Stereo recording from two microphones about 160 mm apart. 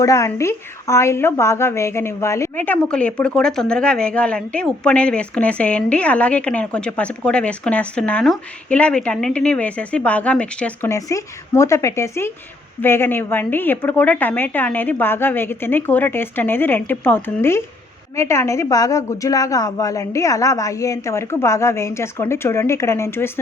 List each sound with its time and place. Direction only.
0.0 s a woman's voice: 20° left (ahead or behind)
10.8 s a woman's voice: 20° left (ahead or behind)